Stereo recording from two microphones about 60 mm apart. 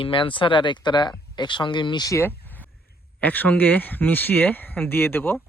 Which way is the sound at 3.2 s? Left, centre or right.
Left.